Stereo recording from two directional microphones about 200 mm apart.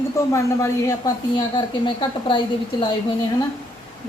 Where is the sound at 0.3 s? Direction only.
15° left (ahead or behind).